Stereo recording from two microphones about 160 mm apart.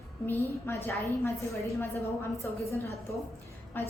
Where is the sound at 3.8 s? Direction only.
10° left (ahead or behind).